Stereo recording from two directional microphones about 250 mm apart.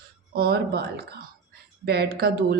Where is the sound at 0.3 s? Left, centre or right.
Right.